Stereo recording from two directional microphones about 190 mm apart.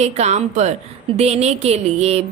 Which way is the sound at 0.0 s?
35° right (ahead or behind).